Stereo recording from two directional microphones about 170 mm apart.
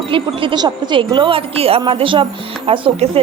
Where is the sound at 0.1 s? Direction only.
25° right (ahead or behind).